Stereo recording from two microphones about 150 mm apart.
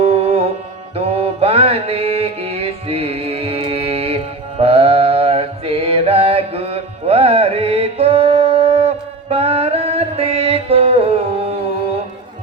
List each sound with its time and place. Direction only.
0.0 s music: 45° right (ahead or behind)
0.9 s mantra: 40° right (ahead or behind)